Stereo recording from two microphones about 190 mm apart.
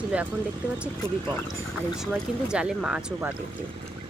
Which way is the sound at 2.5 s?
5° right (ahead or behind).